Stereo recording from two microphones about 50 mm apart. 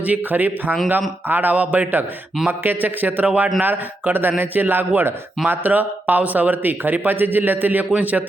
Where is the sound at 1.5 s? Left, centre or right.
Right.